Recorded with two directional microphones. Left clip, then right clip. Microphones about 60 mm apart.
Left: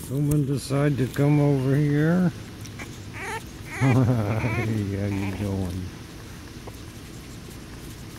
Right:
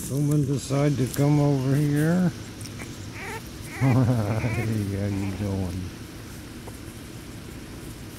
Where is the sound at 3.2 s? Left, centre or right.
Left.